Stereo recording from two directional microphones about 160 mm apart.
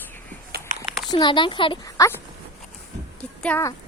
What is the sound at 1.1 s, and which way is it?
Speech, 30° left (ahead or behind).